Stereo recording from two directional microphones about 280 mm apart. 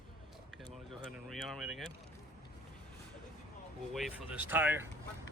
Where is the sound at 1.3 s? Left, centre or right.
Centre.